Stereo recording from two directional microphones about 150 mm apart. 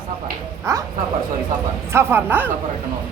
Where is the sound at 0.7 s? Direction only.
20° right (ahead or behind).